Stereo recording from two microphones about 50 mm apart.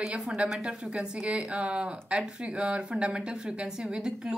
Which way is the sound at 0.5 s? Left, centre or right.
Centre.